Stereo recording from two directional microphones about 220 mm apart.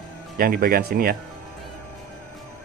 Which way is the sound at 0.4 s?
40° right (ahead or behind).